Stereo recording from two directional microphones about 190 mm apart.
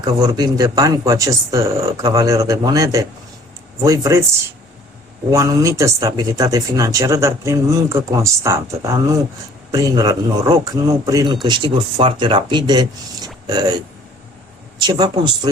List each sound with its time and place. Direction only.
0.0 s speech: 20° right (ahead or behind)
5.3 s speech: 15° right (ahead or behind)